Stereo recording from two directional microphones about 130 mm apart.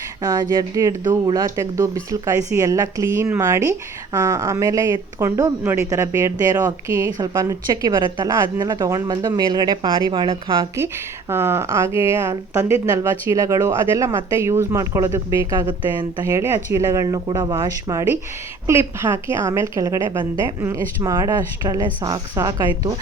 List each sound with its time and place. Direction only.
0.2 s a woman's voice: 30° right (ahead or behind)
11.3 s a woman's voice: 20° right (ahead or behind); by 16.2 s 35° right (ahead or behind)
16.2 s a woman's voice: 20° right (ahead or behind)
17.5 s a woman's voice: 20° right (ahead or behind)